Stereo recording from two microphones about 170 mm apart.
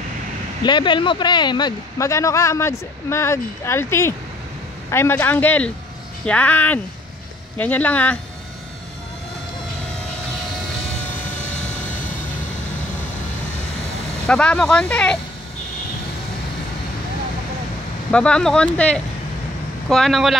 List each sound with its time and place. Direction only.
0.7 s speech: 25° left (ahead or behind); by 8.2 s 10° left (ahead or behind)
14.2 s speech: 5° left (ahead or behind)
18.1 s speech: 5° left (ahead or behind)